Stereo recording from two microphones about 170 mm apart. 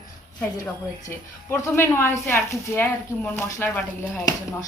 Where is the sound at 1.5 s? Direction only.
15° left (ahead or behind).